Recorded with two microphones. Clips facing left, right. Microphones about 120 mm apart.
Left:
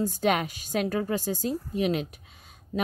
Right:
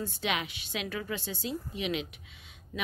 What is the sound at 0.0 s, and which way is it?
A woman's voice, 40° left (ahead or behind).